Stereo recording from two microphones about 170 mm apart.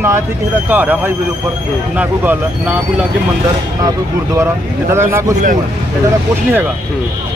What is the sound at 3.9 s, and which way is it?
Speech, 15° right (ahead or behind).